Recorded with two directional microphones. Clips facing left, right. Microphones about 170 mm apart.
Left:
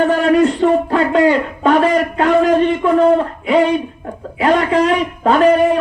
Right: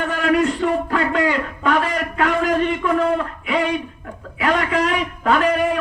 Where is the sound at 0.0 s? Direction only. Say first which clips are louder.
Left 6 dB; 30° left (ahead or behind).